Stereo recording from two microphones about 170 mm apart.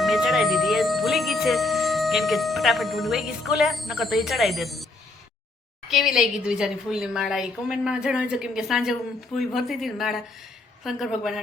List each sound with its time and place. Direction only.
0.0 s music: centre (ahead or behind)
5.9 s a woman's voice: centre (ahead or behind)